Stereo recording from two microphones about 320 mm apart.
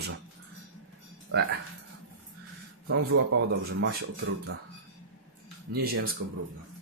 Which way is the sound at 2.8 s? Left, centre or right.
Right.